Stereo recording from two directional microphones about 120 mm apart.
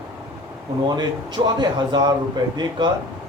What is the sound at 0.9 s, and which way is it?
A man's voice, 35° right (ahead or behind).